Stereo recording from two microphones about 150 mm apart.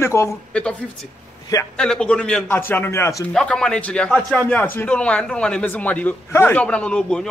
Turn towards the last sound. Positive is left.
turn(degrees=5)  # may be behind; listen again after turning